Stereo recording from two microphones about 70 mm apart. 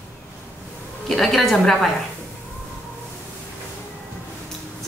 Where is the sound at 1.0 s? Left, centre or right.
Centre.